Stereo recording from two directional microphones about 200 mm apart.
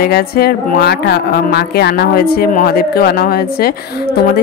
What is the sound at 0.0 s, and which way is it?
Speech, 50° left (ahead or behind).